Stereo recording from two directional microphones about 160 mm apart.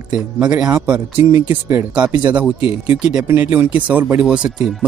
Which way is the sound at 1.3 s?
20° right (ahead or behind).